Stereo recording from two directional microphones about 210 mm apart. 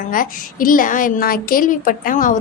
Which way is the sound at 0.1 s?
40° left (ahead or behind).